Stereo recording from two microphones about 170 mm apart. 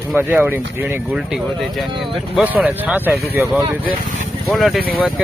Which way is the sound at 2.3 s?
5° right (ahead or behind).